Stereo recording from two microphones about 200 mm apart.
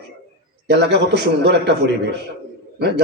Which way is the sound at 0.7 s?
60° right (ahead or behind).